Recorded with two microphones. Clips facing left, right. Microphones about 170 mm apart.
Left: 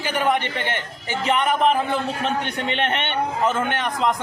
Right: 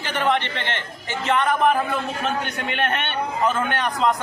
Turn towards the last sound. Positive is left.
turn(degrees=20)  # may be behind; listen again after turning